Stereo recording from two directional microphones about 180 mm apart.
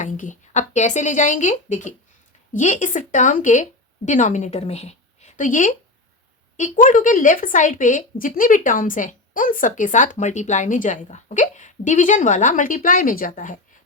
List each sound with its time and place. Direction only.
0.0 s a woman's voice: 45° left (ahead or behind)